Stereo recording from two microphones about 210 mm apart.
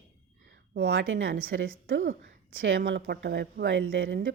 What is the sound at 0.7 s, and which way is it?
Speech, 60° right (ahead or behind).